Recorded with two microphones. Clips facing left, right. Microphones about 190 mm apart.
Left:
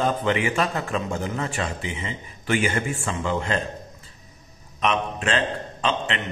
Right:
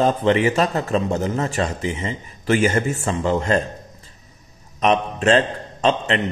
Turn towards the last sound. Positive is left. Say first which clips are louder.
# right 6 dB
turn(degrees=-40)  # may be behind; listen again after turning